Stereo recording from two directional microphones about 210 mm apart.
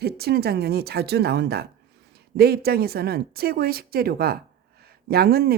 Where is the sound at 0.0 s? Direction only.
50° right (ahead or behind).